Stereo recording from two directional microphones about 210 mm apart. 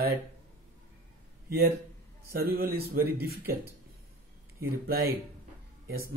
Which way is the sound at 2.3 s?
45° right (ahead or behind).